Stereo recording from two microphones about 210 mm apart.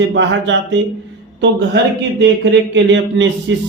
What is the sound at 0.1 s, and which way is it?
Speech, 60° right (ahead or behind).